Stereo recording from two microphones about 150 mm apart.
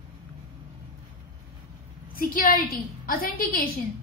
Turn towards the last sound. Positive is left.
turn(degrees=75)  # may be behind; listen again after turning